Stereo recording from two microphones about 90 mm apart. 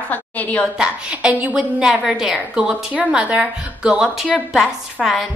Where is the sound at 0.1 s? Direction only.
15° left (ahead or behind).